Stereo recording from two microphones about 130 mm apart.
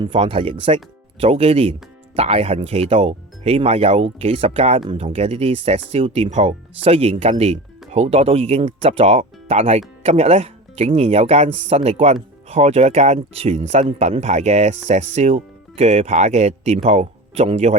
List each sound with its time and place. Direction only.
0.0 s speech: 45° right (ahead or behind)